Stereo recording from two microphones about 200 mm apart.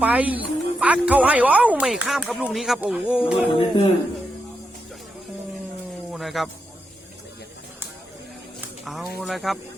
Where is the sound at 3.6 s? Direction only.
25° left (ahead or behind).